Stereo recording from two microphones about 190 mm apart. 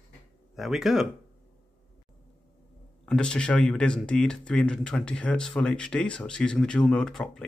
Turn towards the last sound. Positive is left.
turn(degrees=5)  # may be behind; listen again after turning